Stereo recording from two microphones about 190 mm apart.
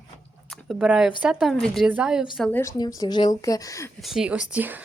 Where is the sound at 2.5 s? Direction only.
15° left (ahead or behind).